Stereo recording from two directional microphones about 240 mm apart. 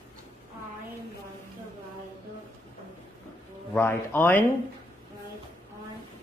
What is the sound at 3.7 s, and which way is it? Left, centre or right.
Speech, centre.